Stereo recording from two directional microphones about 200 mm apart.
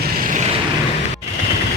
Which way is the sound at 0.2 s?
40° right (ahead or behind).